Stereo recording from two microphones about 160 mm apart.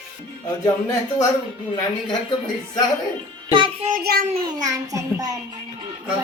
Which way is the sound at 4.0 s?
75° right (ahead or behind).